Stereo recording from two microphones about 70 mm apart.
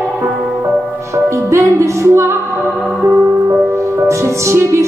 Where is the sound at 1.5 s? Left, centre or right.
Right.